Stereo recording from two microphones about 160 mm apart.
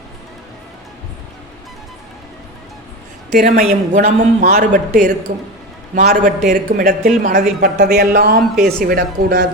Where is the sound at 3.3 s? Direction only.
55° right (ahead or behind).